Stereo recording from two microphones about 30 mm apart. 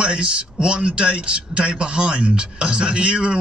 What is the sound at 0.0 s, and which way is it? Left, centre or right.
Speech, right.